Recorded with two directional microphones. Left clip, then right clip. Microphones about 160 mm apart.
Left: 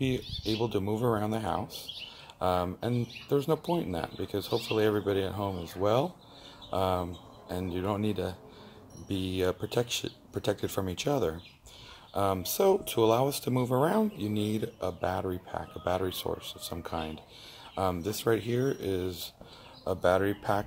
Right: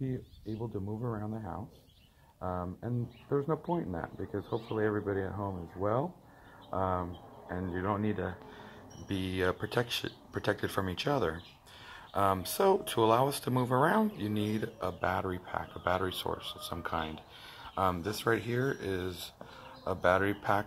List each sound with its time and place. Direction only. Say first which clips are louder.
0.0 s speech: left 9 dB; centre (ahead or behind)
2.4 s speech: left 9 dB; 30° left (ahead or behind)
9.1 s speech: left 2 dB; 10° left (ahead or behind)